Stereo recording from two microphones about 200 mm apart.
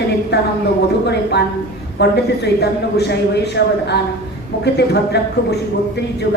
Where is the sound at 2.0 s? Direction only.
55° left (ahead or behind).